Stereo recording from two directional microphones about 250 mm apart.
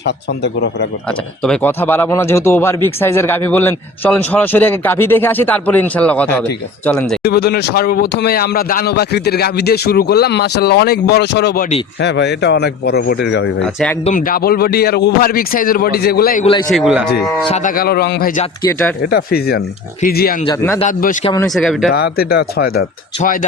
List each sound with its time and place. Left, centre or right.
0.4 s speech: left
1.5 s speech: centre
7.3 s speech: left
14.0 s speech: left
16.7 s speech: centre
17.5 s speech: left
20.5 s speech: centre
20.8 s speech: left
21.4 s speech: centre
21.9 s speech: left